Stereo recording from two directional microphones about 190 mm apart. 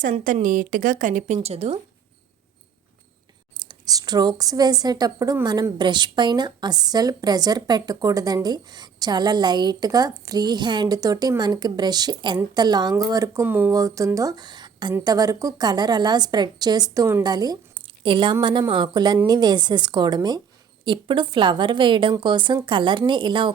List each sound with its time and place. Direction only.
0.0 s a woman's voice: 40° right (ahead or behind)
3.6 s a woman's voice: 20° right (ahead or behind)